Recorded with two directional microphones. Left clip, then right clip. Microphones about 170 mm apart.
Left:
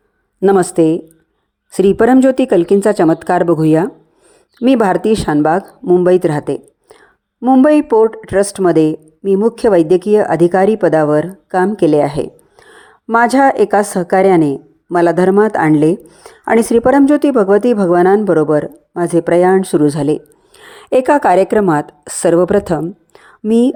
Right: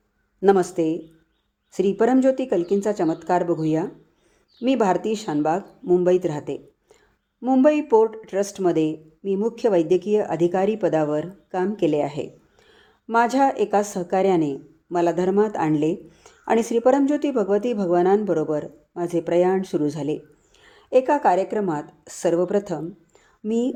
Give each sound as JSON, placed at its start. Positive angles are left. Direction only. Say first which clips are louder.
{"t": 0.3, "sound": "speech", "louder": "left 8 dB", "side_deg": 35}